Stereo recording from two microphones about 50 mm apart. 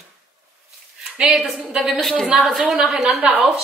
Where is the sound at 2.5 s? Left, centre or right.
Centre.